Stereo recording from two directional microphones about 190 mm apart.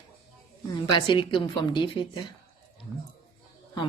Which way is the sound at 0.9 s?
25° left (ahead or behind).